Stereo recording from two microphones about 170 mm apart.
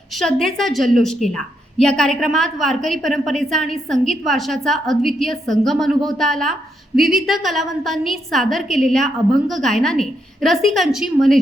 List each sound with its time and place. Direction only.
0.2 s a woman's voice: centre (ahead or behind)